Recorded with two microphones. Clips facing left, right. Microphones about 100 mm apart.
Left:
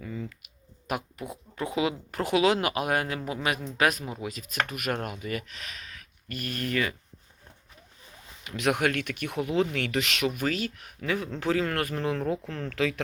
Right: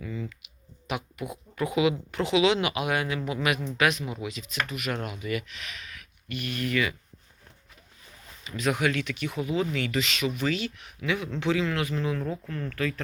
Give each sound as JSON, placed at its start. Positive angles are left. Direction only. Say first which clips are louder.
{"t": 0.0, "sound": "speech", "louder": "right 1 dB", "side_deg": 35}
{"t": 8.4, "sound": "speech", "louder": "left 1 dB", "side_deg": 65}